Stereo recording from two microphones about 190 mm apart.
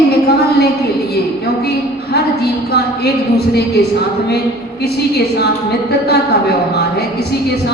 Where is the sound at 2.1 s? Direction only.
60° left (ahead or behind).